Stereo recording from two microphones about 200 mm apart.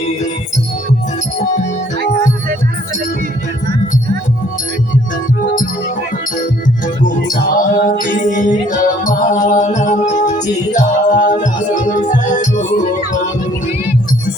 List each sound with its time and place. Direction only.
6.8 s music: 40° left (ahead or behind)